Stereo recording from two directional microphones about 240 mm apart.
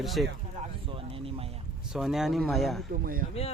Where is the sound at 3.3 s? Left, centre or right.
Left.